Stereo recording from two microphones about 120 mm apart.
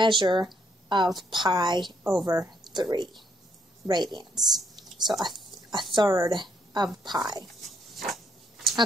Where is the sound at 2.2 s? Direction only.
30° right (ahead or behind).